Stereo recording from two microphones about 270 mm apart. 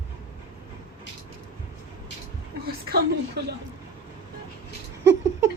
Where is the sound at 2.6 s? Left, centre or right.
Right.